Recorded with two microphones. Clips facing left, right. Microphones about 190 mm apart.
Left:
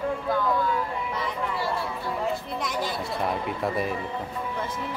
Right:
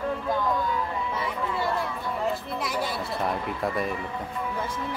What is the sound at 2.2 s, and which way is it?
Speech, 5° right (ahead or behind).